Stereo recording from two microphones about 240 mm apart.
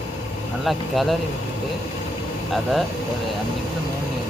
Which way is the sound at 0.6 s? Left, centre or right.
Centre.